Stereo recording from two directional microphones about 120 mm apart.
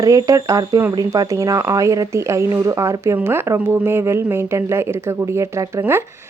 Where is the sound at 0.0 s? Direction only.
30° right (ahead or behind).